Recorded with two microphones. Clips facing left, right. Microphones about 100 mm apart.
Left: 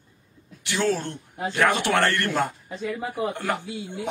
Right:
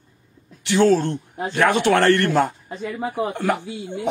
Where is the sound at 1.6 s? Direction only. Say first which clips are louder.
Right 4 dB; 20° right (ahead or behind).